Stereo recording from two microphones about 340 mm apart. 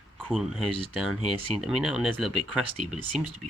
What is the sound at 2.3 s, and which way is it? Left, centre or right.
Speech, right.